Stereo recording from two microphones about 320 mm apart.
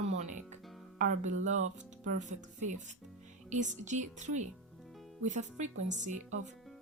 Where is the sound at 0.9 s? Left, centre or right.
Right.